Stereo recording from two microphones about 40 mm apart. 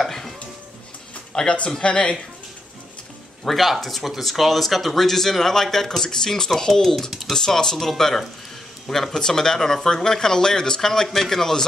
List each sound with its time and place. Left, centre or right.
0.0 s music: centre
1.3 s speech: centre
3.4 s speech: centre
7.1 s speech: centre
7.3 s speech: centre